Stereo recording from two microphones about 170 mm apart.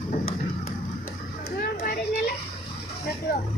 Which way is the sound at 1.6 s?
60° left (ahead or behind).